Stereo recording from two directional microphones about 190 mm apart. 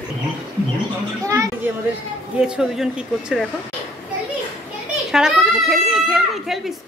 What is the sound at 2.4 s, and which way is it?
Speech, 5° right (ahead or behind).